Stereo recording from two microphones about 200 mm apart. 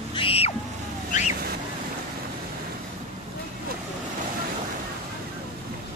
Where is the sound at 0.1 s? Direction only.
25° left (ahead or behind).